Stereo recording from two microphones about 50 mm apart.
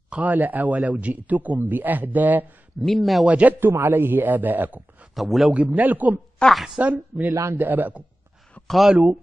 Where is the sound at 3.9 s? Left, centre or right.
Right.